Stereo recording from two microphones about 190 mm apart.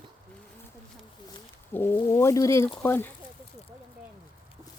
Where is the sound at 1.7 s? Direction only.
10° left (ahead or behind).